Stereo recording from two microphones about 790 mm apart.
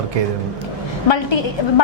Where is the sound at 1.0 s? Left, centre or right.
Left.